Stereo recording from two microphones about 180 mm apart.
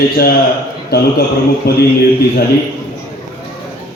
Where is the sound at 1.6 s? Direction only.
60° left (ahead or behind).